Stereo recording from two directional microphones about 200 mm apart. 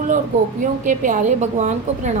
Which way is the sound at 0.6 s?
40° right (ahead or behind).